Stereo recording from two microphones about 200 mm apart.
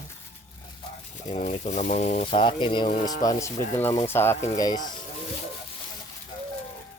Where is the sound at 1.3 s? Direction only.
35° left (ahead or behind).